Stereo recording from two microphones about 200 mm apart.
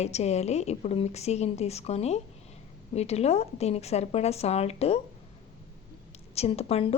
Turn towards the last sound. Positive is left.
turn(degrees=30)  # may be behind; listen again after turning